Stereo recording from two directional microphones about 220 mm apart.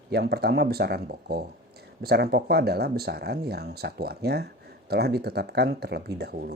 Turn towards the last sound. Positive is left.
turn(degrees=-45)  # may be behind; listen again after turning